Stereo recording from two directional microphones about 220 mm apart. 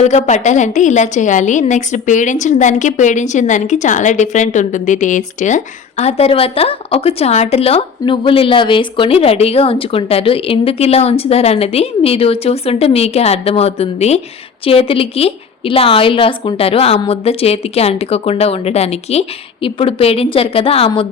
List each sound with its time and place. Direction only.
0.0 s a woman's voice: 30° left (ahead or behind)